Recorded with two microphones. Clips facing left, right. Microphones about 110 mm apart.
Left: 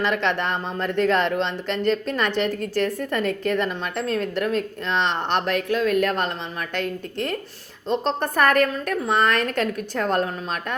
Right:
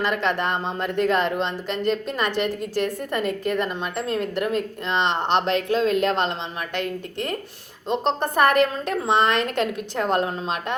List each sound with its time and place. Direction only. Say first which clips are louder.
0.0 s a woman's voice: even; 10° right (ahead or behind)
7.9 s a woman's voice: even; 15° right (ahead or behind)